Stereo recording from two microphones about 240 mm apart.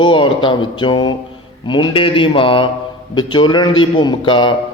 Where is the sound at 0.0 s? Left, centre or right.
Left.